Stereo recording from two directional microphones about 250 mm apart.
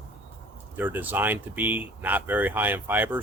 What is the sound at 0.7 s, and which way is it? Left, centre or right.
Speech, centre.